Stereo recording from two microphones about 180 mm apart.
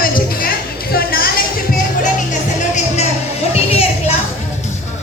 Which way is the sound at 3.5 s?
35° left (ahead or behind).